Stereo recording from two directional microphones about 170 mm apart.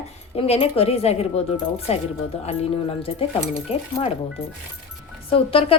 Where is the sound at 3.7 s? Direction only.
35° left (ahead or behind).